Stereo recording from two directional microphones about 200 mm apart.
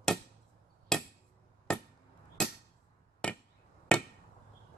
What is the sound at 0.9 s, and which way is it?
Hammer, 5° left (ahead or behind).